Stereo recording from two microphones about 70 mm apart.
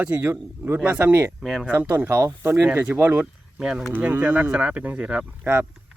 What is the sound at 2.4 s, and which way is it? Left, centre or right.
Speech, right.